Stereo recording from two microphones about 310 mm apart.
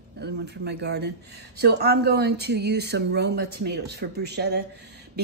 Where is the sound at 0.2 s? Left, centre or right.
Right.